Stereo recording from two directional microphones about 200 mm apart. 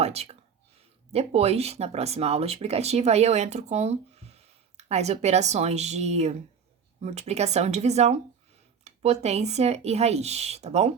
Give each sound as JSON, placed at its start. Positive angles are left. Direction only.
{"t": 0.0, "sound": "speech", "side_deg": -30}